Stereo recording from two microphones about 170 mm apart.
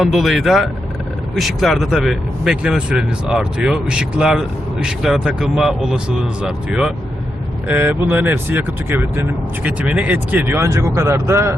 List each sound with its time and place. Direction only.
0.0 s speech: centre (ahead or behind)